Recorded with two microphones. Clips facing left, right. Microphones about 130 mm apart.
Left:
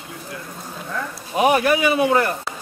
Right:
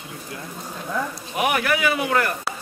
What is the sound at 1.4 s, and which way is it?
Speech, 25° left (ahead or behind).